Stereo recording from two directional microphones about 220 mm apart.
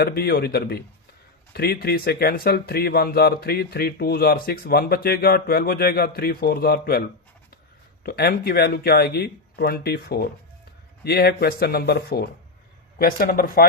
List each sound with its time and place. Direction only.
0.0 s speech: 45° left (ahead or behind)